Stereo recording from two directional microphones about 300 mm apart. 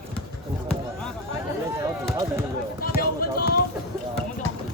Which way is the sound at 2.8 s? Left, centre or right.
Left.